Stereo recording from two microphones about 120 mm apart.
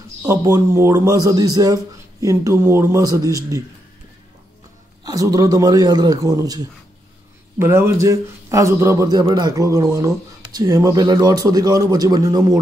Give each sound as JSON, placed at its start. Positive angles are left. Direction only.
{"t": 0.2, "sound": "speech", "side_deg": -30}
{"t": 5.0, "sound": "a man's voice", "side_deg": -30}
{"t": 7.5, "sound": "speech", "side_deg": -20}